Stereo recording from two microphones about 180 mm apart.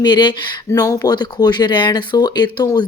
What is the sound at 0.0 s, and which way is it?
Speech, 25° left (ahead or behind).